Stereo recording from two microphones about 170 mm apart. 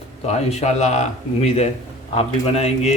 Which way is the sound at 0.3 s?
40° left (ahead or behind).